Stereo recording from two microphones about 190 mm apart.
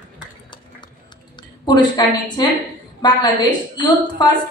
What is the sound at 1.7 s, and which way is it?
A woman's voice, 20° left (ahead or behind).